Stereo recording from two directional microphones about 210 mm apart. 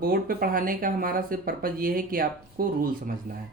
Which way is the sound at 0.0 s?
45° right (ahead or behind).